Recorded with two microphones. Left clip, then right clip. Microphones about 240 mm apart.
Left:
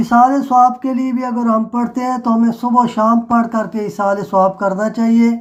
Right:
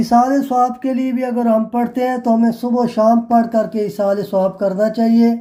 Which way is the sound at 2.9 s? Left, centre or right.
Centre.